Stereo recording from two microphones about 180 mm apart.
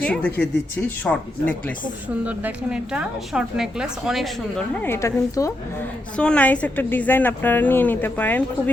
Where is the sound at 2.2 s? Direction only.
10° right (ahead or behind).